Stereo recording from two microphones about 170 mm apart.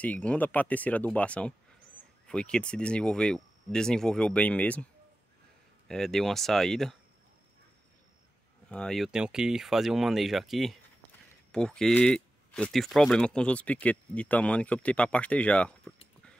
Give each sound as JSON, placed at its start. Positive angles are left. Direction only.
{"t": 0.0, "sound": "speech", "side_deg": 10}
{"t": 5.9, "sound": "speech", "side_deg": 0}
{"t": 8.6, "sound": "speech", "side_deg": 5}